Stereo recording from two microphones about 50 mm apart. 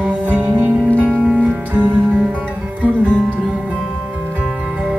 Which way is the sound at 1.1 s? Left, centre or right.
Centre.